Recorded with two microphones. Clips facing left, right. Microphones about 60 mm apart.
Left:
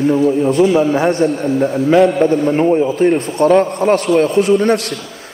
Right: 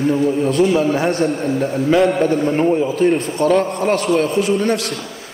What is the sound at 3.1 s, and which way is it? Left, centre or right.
A man's voice, left.